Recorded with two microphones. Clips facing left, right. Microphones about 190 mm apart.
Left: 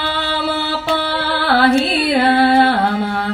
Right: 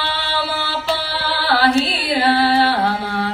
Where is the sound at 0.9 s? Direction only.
55° left (ahead or behind).